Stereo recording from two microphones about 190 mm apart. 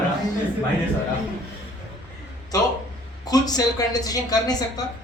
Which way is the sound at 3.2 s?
20° left (ahead or behind).